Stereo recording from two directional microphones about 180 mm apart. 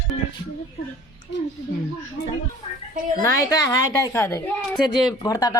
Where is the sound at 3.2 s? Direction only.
20° left (ahead or behind).